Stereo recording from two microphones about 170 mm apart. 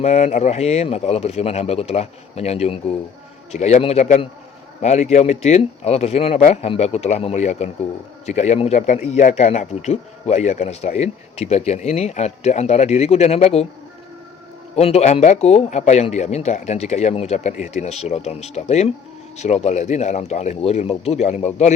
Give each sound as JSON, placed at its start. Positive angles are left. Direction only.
{"t": 0.0, "sound": "a man's voice", "side_deg": 40}
{"t": 14.8, "sound": "a man's voice", "side_deg": 40}